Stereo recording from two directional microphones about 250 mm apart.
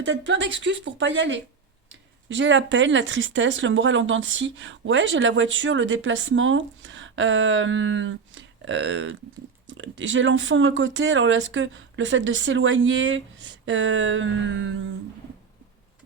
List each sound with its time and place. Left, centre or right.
0.0 s speech: right